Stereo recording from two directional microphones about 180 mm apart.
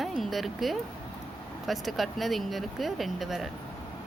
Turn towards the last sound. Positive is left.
turn(degrees=0)  # may be behind; listen again after turning